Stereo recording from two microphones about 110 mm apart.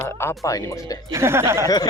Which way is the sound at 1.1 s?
25° right (ahead or behind).